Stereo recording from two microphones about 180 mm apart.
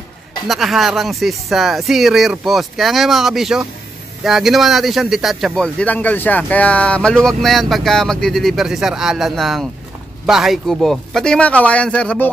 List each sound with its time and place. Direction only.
0.5 s a man's voice: centre (ahead or behind)